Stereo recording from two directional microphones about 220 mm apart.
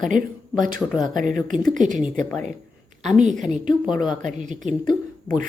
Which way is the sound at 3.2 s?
35° right (ahead or behind).